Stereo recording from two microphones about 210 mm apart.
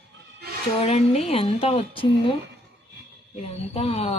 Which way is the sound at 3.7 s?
30° left (ahead or behind).